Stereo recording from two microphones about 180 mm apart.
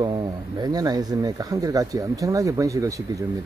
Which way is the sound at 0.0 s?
25° right (ahead or behind).